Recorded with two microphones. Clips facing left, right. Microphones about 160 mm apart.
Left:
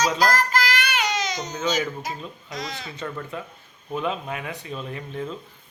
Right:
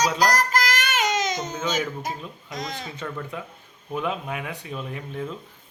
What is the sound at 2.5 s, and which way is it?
Speech, 45° right (ahead or behind).